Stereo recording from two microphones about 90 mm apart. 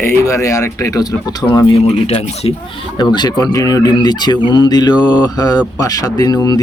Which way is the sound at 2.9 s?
55° left (ahead or behind).